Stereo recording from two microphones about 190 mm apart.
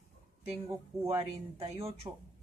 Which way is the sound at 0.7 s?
15° right (ahead or behind).